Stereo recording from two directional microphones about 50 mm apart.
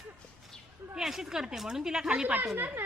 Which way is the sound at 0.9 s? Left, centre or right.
Centre.